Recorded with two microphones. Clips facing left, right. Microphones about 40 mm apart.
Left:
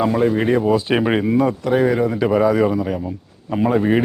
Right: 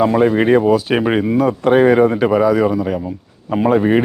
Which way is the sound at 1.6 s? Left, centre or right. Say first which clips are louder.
Right 6 dB; right.